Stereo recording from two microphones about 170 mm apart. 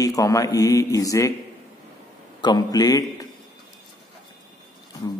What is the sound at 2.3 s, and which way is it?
Speech, 25° left (ahead or behind).